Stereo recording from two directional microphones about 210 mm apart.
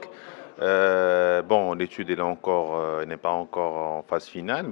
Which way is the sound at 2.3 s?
25° left (ahead or behind).